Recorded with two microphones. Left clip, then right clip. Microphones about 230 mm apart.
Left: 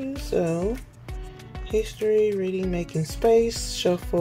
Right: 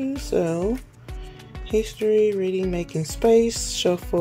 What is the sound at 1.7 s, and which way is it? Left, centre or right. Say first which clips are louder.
Speech: right 2 dB; right.